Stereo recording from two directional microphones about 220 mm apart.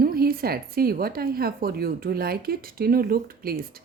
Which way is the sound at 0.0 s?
40° right (ahead or behind).